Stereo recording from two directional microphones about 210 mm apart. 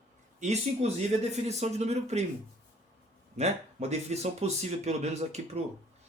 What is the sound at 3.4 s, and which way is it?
Speech, 30° right (ahead or behind).